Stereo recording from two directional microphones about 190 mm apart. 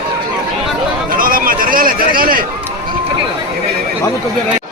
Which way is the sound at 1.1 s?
50° right (ahead or behind).